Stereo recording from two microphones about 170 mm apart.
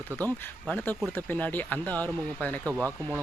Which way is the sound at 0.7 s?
10° left (ahead or behind).